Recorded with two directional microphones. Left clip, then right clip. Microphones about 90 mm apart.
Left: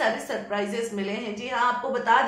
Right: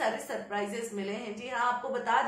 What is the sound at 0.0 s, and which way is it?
A woman's voice, 25° left (ahead or behind).